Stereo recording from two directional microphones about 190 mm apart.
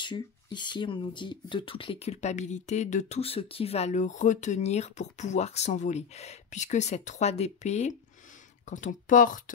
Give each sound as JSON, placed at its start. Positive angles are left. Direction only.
{"t": 0.0, "sound": "speech", "side_deg": 25}